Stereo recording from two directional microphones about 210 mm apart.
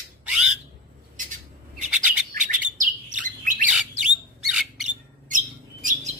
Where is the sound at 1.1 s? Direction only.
40° right (ahead or behind).